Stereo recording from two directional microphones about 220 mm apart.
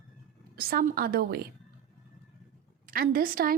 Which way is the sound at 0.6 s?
40° right (ahead or behind).